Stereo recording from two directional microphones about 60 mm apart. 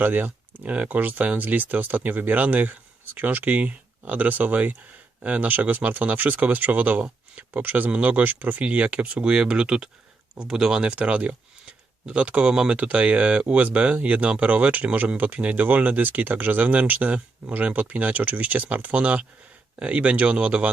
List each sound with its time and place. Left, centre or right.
0.0 s speech: right